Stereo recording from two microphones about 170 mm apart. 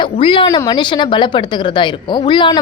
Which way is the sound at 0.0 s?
30° left (ahead or behind).